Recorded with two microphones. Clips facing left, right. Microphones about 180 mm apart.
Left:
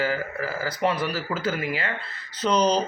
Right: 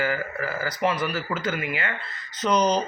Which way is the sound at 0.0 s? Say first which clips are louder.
Even; 30° left (ahead or behind).